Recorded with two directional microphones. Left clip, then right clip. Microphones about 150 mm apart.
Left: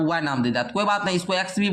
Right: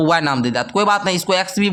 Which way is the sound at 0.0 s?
45° right (ahead or behind).